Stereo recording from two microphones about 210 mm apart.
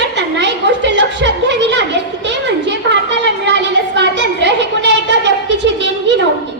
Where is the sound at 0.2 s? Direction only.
55° right (ahead or behind).